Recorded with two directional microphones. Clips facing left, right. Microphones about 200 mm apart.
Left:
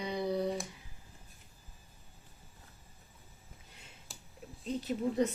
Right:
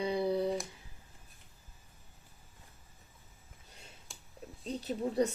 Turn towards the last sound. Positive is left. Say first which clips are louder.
# even
turn(degrees=-35)  # may be behind; listen again after turning